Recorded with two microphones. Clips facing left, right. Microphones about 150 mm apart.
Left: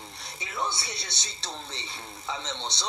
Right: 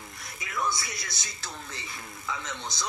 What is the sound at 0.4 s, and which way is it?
A woman's voice, 30° left (ahead or behind).